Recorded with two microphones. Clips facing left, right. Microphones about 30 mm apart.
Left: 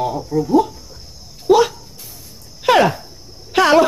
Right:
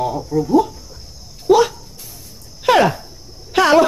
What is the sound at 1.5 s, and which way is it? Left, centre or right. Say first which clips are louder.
Dog: even; centre.